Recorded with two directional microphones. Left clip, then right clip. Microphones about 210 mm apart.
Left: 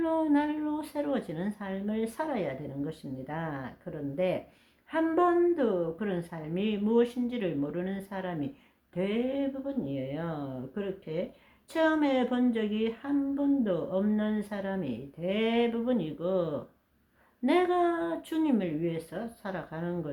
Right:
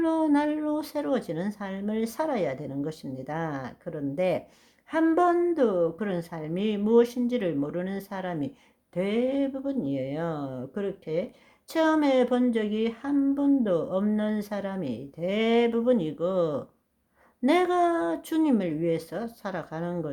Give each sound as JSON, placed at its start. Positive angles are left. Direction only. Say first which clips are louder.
{"t": 0.0, "sound": "speech", "louder": "right 3 dB", "side_deg": -45}